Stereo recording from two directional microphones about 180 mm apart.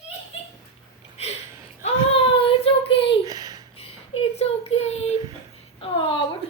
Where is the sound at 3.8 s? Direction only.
30° left (ahead or behind).